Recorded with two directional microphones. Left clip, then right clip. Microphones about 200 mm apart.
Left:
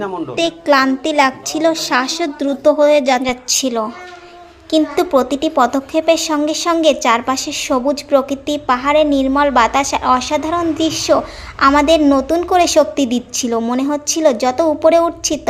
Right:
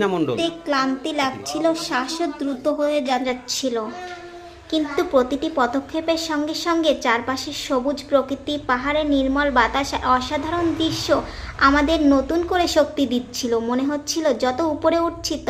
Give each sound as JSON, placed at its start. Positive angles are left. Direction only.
{"t": 0.0, "sound": "a woman's voice", "side_deg": -55}
{"t": 0.3, "sound": "a woman's voice", "side_deg": 35}